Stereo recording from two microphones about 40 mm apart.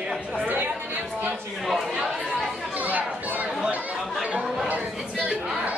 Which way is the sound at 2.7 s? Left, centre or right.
Right.